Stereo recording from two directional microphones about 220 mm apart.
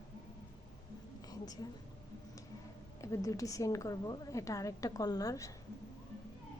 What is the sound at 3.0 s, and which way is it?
A woman's voice, 15° left (ahead or behind).